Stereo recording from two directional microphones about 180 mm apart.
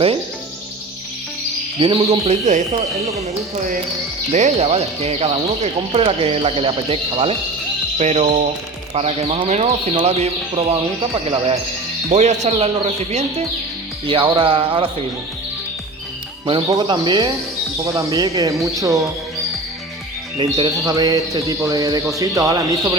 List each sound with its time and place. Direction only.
1.8 s speech: 30° right (ahead or behind)
4.3 s speech: 40° right (ahead or behind)
12.1 s speech: 40° right (ahead or behind)
16.5 s speech: 25° right (ahead or behind)
20.4 s speech: 20° right (ahead or behind)